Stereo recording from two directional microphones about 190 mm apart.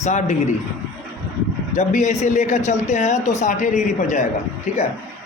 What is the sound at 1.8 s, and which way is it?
A man's voice, 40° left (ahead or behind).